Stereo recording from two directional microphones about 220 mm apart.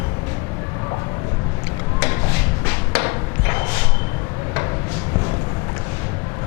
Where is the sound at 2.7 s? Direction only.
15° left (ahead or behind).